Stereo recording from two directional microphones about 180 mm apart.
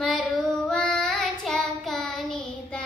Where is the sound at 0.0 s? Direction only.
Centre (ahead or behind).